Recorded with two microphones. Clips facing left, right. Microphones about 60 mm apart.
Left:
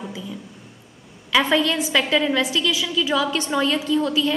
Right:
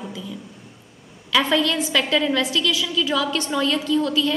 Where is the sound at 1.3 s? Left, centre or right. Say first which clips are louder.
Left 1 dB; centre.